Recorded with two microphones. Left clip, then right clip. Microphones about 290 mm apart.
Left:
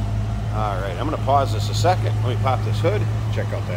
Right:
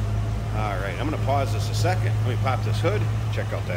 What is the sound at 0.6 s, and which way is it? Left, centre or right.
Speech, centre.